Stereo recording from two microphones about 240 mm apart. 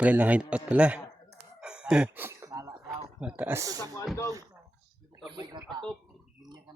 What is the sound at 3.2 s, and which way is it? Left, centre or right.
Speech, centre.